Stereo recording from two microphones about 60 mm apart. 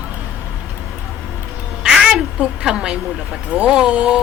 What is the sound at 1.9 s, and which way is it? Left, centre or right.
A woman's voice, centre.